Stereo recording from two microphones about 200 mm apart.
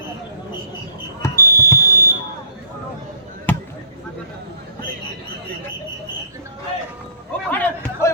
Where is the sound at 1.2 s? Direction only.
15° left (ahead or behind).